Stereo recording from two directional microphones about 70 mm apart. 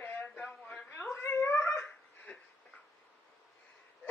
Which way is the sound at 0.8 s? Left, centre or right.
Left.